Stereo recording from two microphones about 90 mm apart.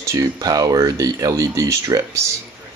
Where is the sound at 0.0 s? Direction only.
35° right (ahead or behind).